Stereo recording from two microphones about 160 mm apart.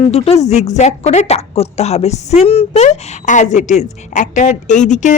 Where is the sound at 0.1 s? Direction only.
40° left (ahead or behind).